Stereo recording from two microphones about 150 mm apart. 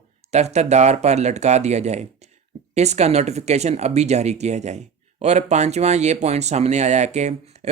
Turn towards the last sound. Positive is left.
turn(degrees=-50)  # may be behind; listen again after turning